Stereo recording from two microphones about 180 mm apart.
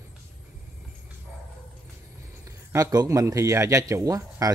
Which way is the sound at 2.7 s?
20° right (ahead or behind).